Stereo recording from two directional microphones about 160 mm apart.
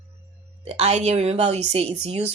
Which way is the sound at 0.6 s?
40° right (ahead or behind).